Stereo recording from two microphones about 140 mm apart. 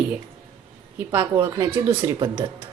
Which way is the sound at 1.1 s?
20° right (ahead or behind).